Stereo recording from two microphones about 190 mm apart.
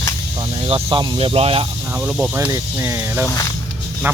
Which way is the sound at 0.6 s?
30° right (ahead or behind).